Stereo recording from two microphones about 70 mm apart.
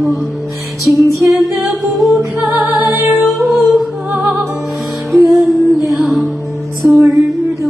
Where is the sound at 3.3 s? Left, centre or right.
Centre.